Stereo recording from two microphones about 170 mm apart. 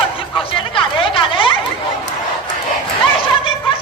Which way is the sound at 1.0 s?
30° left (ahead or behind).